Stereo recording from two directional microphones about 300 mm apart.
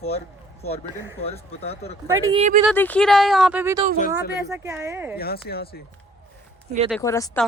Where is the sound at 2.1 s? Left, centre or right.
Centre.